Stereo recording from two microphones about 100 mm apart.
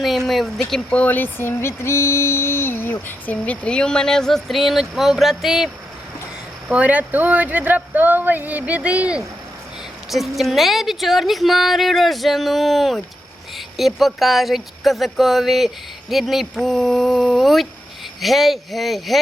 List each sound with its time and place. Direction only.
0.3 s speech: centre (ahead or behind)
0.9 s speech: 15° left (ahead or behind); by 5.7 s centre (ahead or behind)
6.7 s speech: 15° right (ahead or behind)
10.1 s speech: centre (ahead or behind)